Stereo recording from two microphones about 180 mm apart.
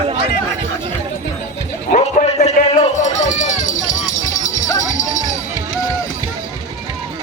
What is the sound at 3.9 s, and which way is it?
Jingle bell, 45° left (ahead or behind).